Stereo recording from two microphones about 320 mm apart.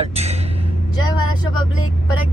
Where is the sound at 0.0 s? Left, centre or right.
Centre.